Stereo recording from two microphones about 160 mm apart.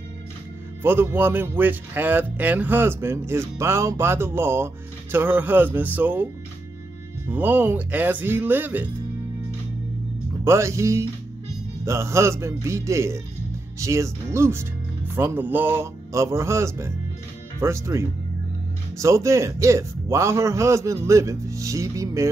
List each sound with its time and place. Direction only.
0.8 s speech: 15° right (ahead or behind)
7.2 s speech: 10° right (ahead or behind)
10.4 s a man's voice: 15° right (ahead or behind)